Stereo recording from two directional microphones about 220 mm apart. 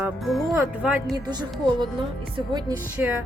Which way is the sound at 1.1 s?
20° right (ahead or behind).